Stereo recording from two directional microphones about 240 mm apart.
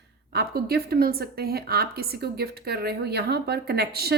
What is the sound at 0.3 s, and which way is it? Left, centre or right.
Speech, right.